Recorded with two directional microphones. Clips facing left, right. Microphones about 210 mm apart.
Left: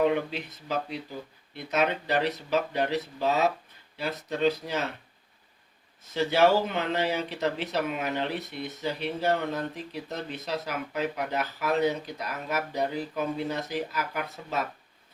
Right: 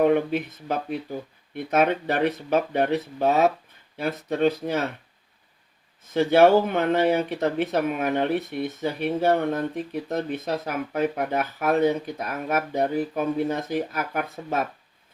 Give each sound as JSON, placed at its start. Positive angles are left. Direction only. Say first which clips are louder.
{"t": 0.0, "sound": "speech", "louder": "right 5 dB", "side_deg": -55}
{"t": 6.1, "sound": "speech", "louder": "right 6 dB", "side_deg": -55}